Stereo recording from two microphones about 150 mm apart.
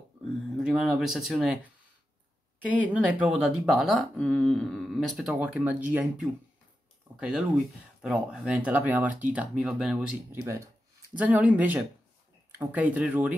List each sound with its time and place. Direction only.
0.6 s speech: 5° right (ahead or behind)
2.6 s speech: 10° right (ahead or behind)
10.4 s speech: 20° right (ahead or behind)